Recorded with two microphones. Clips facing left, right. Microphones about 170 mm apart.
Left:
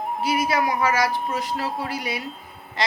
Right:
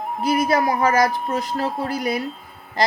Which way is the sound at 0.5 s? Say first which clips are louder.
Right 4 dB; 35° right (ahead or behind).